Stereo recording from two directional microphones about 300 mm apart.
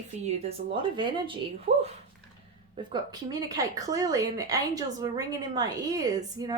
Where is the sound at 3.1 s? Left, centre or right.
Centre.